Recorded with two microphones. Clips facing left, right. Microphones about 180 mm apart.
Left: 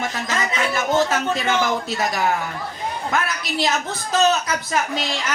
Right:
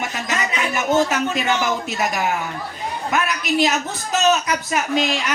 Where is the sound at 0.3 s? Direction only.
15° right (ahead or behind).